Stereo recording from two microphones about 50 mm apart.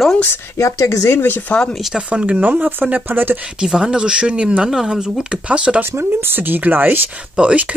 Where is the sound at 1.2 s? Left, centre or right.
Left.